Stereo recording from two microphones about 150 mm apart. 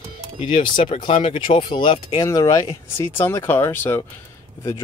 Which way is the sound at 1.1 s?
40° left (ahead or behind).